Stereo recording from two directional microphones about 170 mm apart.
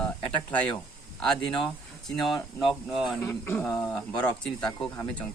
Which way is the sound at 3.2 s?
15° left (ahead or behind).